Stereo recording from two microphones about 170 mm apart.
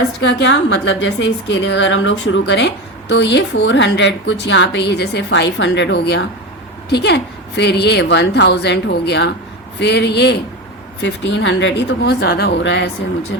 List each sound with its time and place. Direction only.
0.2 s a woman's voice: 90° left